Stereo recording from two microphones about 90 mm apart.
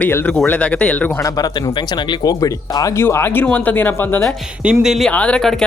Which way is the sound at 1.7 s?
60° left (ahead or behind).